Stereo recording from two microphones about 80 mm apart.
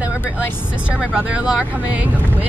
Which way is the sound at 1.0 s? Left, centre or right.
Centre.